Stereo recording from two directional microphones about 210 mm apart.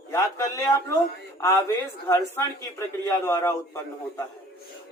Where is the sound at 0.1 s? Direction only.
15° left (ahead or behind).